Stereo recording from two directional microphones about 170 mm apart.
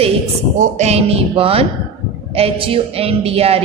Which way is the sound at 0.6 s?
40° right (ahead or behind).